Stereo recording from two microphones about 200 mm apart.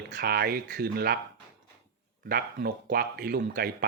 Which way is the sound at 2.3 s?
55° right (ahead or behind).